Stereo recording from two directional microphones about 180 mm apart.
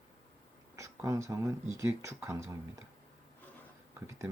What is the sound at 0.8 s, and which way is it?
Speech, 15° right (ahead or behind).